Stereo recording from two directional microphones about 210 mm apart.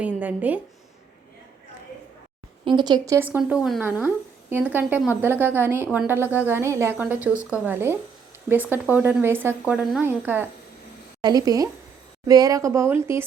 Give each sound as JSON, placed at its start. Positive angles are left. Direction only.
{"t": 0.0, "sound": "speech", "side_deg": -5}
{"t": 2.6, "sound": "a woman's voice", "side_deg": -20}